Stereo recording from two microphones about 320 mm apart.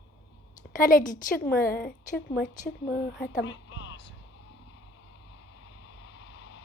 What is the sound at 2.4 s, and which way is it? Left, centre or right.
A woman's voice, left.